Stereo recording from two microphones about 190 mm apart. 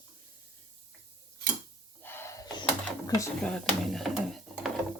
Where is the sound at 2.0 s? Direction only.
10° left (ahead or behind).